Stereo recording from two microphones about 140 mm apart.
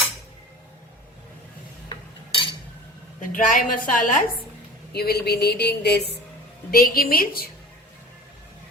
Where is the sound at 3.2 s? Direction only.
70° left (ahead or behind).